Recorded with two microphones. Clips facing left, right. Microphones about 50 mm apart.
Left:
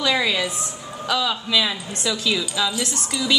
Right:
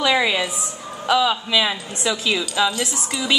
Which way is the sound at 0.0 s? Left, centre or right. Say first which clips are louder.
Right 2 dB; centre.